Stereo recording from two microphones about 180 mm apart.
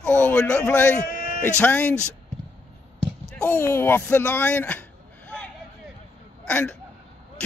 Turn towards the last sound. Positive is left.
turn(degrees=5)  # may be behind; listen again after turning